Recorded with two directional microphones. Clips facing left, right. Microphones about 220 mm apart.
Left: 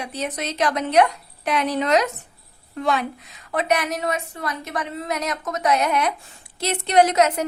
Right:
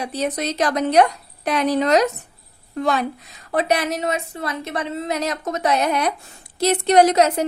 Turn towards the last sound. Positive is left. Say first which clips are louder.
# right 2 dB
turn(degrees=-35)  # may be behind; listen again after turning